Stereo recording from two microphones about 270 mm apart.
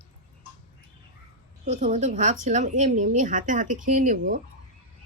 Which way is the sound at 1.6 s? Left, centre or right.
Right.